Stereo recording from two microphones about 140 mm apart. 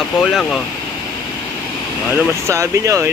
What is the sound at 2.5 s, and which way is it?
Speech, 20° right (ahead or behind).